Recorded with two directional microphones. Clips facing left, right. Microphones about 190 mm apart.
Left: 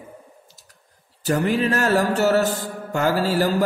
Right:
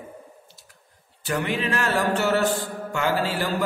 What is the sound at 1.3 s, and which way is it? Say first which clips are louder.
A man's voice: left 5 dB; 40° left (ahead or behind).